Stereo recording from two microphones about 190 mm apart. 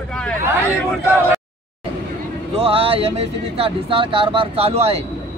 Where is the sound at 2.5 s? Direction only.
30° right (ahead or behind).